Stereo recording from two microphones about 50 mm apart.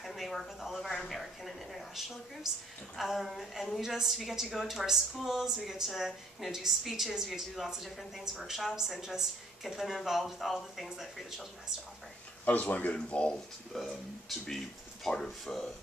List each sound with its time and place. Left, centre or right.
0.0 s a woman's voice: centre
12.4 s speech: left
13.7 s a woman's voice: centre
15.0 s speech: centre